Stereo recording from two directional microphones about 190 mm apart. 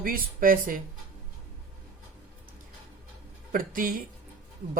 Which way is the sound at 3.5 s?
50° right (ahead or behind).